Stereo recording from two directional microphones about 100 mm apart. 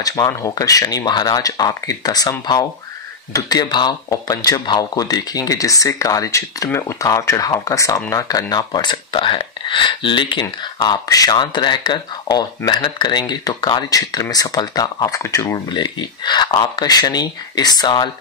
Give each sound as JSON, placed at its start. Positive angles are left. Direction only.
{"t": 0.0, "sound": "speech", "side_deg": 35}
{"t": 10.8, "sound": "speech", "side_deg": 35}
{"t": 15.5, "sound": "speech", "side_deg": 45}